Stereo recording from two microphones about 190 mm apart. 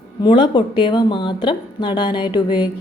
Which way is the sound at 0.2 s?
25° left (ahead or behind).